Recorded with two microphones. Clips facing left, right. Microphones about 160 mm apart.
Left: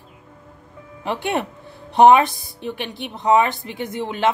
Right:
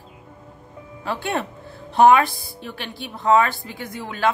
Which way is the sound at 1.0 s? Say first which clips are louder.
Left 2 dB; 15° left (ahead or behind).